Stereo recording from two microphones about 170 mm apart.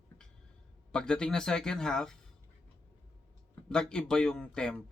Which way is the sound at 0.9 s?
5° left (ahead or behind).